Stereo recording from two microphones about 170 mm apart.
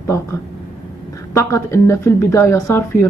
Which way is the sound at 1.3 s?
15° left (ahead or behind).